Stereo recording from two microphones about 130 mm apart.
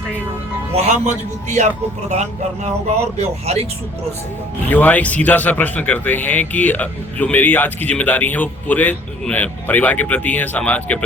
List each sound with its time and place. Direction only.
0.8 s speech: 65° right (ahead or behind)
3.2 s speech: 55° right (ahead or behind)
4.7 s speech: 15° left (ahead or behind)